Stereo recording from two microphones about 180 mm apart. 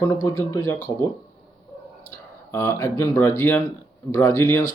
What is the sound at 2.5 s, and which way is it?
Speech, 15° left (ahead or behind).